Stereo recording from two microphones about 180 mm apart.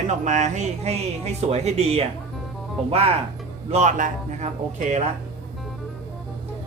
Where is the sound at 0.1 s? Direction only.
40° right (ahead or behind).